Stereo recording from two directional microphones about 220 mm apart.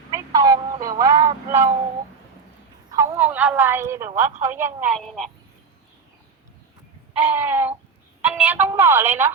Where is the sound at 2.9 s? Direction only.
15° right (ahead or behind); by 5.3 s centre (ahead or behind).